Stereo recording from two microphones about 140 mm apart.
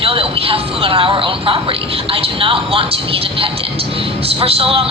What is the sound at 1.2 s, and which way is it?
A man's voice, 40° right (ahead or behind).